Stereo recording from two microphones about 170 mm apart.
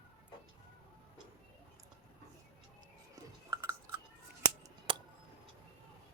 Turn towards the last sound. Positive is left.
turn(degrees=-30)  # may be behind; listen again after turning